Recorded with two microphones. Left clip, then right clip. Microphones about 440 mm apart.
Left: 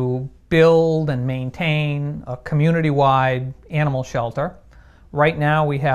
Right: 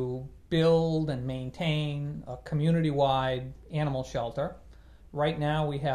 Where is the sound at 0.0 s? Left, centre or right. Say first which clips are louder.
Left 10 dB; left.